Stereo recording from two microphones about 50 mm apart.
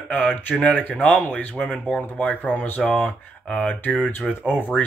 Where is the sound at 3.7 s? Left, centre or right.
Left.